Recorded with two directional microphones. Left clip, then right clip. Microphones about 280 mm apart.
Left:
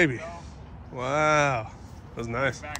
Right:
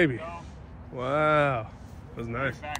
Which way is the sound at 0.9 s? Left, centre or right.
Centre.